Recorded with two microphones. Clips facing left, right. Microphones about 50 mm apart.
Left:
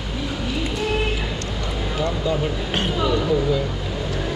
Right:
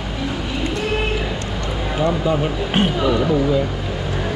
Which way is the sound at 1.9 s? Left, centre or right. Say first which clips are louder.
Right 5 dB; centre.